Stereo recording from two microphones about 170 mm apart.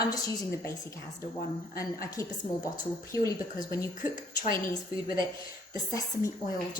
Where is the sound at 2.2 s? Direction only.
20° left (ahead or behind).